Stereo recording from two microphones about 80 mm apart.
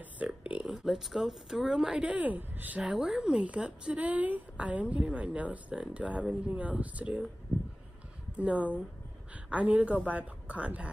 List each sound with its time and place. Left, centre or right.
0.0 s a sound: centre
0.8 s speech: centre; by 2.8 s right
2.8 s speech: centre
8.4 s speech: centre